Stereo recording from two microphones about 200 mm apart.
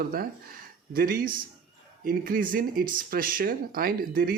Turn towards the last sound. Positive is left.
turn(degrees=-45)  # may be behind; listen again after turning